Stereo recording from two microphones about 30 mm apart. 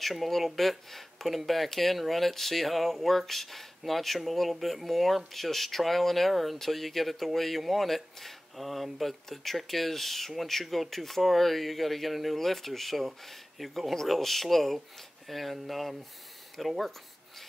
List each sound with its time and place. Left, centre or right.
0.0 s speech: centre